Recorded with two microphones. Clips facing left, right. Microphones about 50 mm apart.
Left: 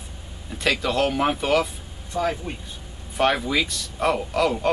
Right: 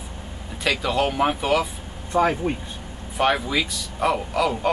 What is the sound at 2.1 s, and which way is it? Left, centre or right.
Speech, right.